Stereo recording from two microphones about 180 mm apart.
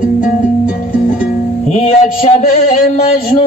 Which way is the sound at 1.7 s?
35° left (ahead or behind).